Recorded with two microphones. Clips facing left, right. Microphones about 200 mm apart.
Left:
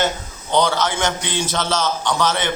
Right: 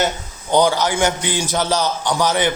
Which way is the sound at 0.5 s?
15° right (ahead or behind).